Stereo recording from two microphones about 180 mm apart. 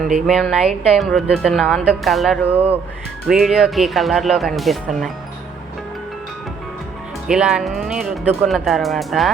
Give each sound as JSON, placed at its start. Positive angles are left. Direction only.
{"t": 0.3, "sound": "speech", "side_deg": 0}
{"t": 7.3, "sound": "speech", "side_deg": -5}